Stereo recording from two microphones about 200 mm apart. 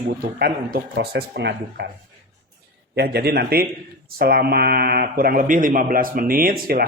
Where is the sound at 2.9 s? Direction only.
55° right (ahead or behind).